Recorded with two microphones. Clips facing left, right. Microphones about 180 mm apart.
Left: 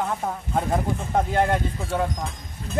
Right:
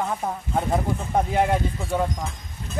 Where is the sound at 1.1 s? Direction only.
10° right (ahead or behind).